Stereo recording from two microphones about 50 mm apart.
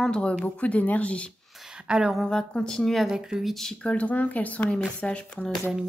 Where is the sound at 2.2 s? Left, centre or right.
Centre.